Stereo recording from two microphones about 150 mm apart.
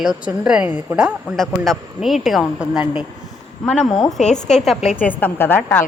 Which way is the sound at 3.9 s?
25° left (ahead or behind).